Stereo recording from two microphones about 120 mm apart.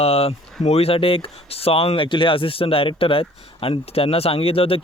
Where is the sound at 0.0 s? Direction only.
55° left (ahead or behind).